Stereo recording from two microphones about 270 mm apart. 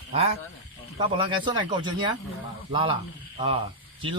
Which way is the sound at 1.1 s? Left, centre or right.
Centre.